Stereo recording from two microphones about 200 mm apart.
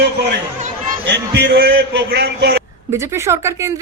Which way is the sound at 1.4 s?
55° right (ahead or behind).